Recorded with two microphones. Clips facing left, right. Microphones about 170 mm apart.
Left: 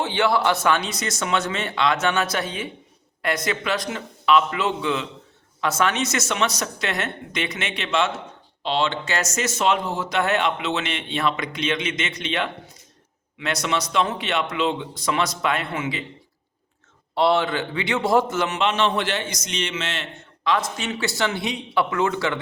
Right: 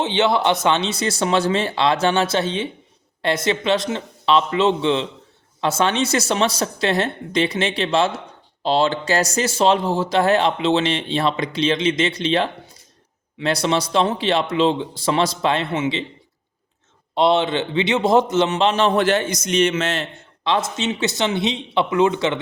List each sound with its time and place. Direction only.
0.0 s speech: 20° right (ahead or behind)
17.2 s speech: 20° right (ahead or behind); by 20.1 s 40° right (ahead or behind)
20.4 s speech: 25° right (ahead or behind)